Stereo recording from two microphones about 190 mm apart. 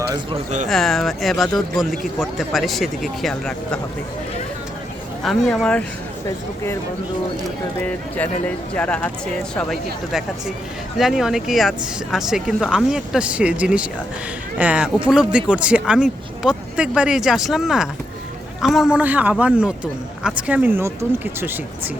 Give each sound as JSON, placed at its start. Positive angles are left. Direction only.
{"t": 0.1, "sound": "speech", "side_deg": -25}
{"t": 0.7, "sound": "speech", "side_deg": 0}
{"t": 5.2, "sound": "speech", "side_deg": 0}
{"t": 7.9, "sound": "a man's voice", "side_deg": 10}